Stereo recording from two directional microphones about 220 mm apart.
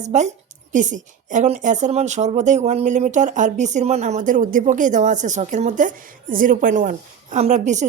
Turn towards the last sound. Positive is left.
turn(degrees=-35)  # may be behind; listen again after turning